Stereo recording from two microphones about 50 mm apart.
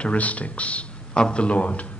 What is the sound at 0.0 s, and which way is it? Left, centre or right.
Speech, left.